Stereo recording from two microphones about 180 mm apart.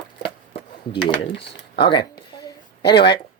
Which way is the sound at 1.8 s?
25° left (ahead or behind).